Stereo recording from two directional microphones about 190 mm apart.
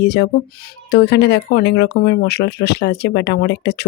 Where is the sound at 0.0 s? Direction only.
60° left (ahead or behind).